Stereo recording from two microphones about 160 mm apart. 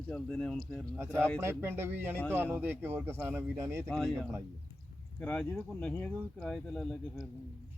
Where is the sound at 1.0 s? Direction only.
15° right (ahead or behind).